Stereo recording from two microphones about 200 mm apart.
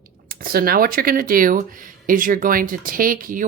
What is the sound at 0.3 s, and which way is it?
Speech, 45° right (ahead or behind).